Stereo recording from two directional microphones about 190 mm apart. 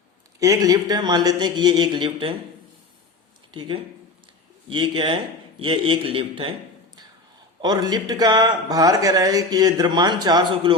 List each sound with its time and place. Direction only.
0.3 s speech: 15° right (ahead or behind)
3.5 s speech: 25° right (ahead or behind)
7.6 s speech: 20° right (ahead or behind)